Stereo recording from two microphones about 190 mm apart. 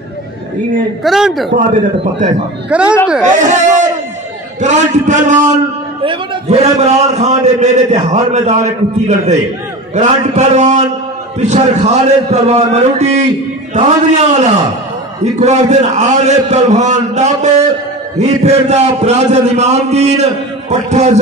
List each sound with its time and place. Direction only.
1.0 s a man's voice: centre (ahead or behind)
2.7 s speech: 5° right (ahead or behind)
3.3 s a man's voice: 40° right (ahead or behind)
6.0 s a sound: 35° right (ahead or behind)
6.8 s a man's voice: 35° right (ahead or behind)